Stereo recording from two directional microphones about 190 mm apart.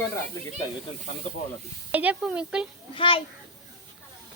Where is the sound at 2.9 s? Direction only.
25° left (ahead or behind).